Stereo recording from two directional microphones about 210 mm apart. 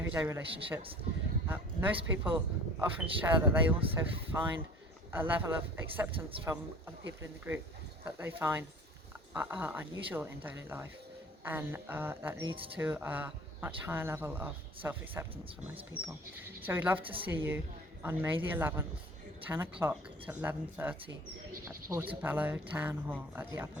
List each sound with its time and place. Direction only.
0.0 s speech: 10° right (ahead or behind)
1.5 s speech: 10° right (ahead or behind)
3.8 s speech: 25° right (ahead or behind)
4.3 s speech: 10° right (ahead or behind)
12.5 s speech: 25° right (ahead or behind)
12.7 s speech: 10° right (ahead or behind)
16.6 s speech: 10° right (ahead or behind)
17.0 s speech: 25° right (ahead or behind)
17.2 s speech: 10° right (ahead or behind)